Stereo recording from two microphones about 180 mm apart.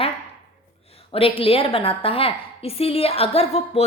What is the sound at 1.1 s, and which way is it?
A woman's voice, 30° left (ahead or behind).